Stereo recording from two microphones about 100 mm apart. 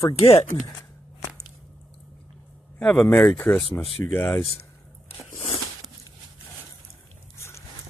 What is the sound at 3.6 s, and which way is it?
Speech, centre (ahead or behind).